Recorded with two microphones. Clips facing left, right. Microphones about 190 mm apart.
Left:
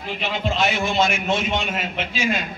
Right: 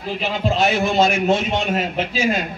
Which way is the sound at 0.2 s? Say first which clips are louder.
Right 3 dB; 35° right (ahead or behind).